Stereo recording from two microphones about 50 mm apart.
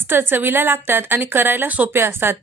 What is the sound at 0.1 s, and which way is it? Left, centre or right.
A woman's voice, right.